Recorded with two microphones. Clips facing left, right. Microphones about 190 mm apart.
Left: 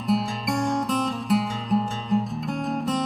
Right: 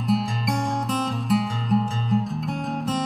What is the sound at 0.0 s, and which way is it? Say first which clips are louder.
Music: right 1 dB; centre (ahead or behind).